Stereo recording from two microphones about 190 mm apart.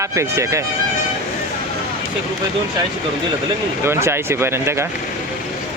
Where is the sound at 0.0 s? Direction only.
15° right (ahead or behind).